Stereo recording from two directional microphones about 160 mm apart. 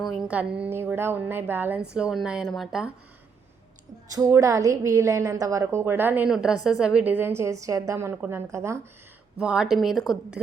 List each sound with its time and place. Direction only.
0.0 s a woman's voice: centre (ahead or behind)
4.1 s a woman's voice: 20° right (ahead or behind)
9.4 s speech: 5° right (ahead or behind)